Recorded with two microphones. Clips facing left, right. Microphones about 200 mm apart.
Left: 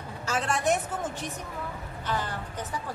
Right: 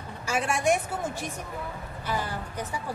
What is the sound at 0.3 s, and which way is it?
Speech, 10° right (ahead or behind).